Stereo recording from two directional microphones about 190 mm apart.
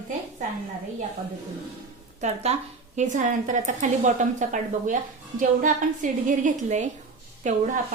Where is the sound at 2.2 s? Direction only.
35° right (ahead or behind).